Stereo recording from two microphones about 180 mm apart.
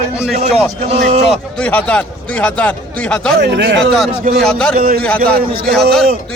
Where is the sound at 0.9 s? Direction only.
40° right (ahead or behind).